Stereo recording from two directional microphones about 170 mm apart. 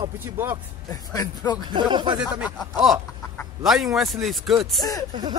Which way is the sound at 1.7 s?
25° right (ahead or behind).